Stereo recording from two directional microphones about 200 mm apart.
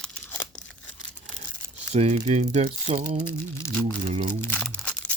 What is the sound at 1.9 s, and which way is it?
Speech, 35° right (ahead or behind).